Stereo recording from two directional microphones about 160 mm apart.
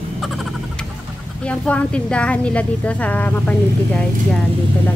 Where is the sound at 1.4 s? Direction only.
5° left (ahead or behind).